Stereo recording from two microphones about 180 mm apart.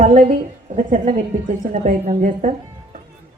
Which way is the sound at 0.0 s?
50° right (ahead or behind).